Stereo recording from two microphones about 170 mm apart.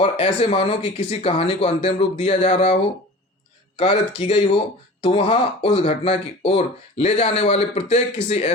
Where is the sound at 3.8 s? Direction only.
35° left (ahead or behind).